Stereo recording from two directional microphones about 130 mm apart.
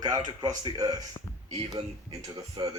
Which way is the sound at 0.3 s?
30° right (ahead or behind).